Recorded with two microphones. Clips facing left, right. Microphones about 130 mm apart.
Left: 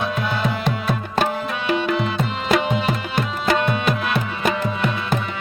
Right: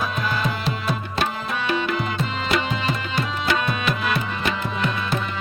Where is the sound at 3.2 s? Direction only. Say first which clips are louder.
Left 4 dB; 50° left (ahead or behind).